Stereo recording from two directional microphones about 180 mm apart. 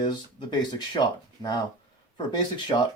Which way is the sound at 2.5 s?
25° left (ahead or behind).